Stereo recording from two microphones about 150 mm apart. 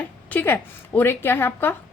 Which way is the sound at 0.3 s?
15° left (ahead or behind).